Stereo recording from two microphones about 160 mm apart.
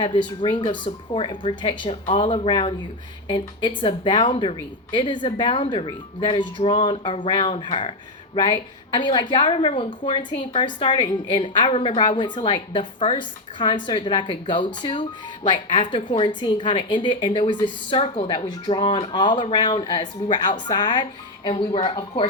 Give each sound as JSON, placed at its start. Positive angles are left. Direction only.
{"t": 0.0, "sound": "a woman's voice", "side_deg": 30}